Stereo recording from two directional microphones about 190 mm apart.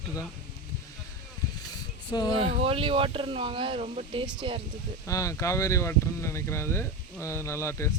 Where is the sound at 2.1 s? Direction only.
20° left (ahead or behind).